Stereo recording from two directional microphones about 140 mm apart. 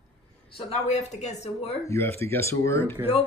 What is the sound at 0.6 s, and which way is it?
Speech, 50° left (ahead or behind).